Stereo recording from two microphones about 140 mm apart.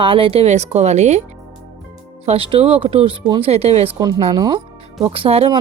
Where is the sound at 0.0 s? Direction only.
40° right (ahead or behind).